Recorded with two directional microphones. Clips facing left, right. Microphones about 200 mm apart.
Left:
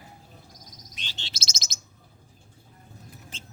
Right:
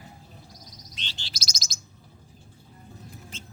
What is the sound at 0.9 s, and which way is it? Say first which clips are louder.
Bird: right 1 dB; 10° left (ahead or behind).